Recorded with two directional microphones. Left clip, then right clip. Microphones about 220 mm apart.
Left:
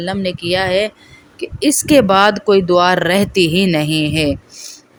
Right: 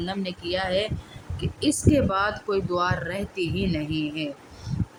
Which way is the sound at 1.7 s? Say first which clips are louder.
Left 12 dB; 40° left (ahead or behind).